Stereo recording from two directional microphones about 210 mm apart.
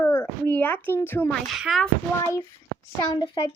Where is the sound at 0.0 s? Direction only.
15° left (ahead or behind).